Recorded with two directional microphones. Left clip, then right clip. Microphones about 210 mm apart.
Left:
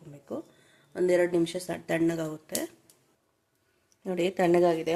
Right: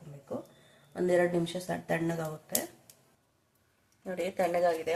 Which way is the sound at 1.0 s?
45° left (ahead or behind).